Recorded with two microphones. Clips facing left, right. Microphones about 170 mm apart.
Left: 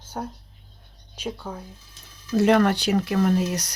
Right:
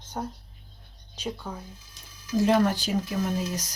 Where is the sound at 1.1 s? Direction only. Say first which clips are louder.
Left 2 dB; 10° left (ahead or behind).